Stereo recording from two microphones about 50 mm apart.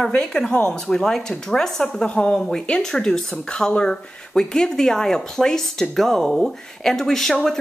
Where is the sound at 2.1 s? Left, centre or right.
Left.